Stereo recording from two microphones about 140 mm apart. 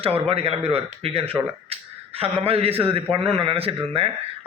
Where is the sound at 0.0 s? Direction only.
45° right (ahead or behind).